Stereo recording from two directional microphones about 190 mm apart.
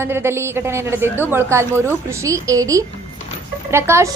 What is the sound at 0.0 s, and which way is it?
A woman's voice, 10° right (ahead or behind).